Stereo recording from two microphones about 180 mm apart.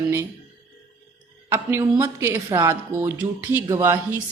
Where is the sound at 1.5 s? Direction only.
15° right (ahead or behind).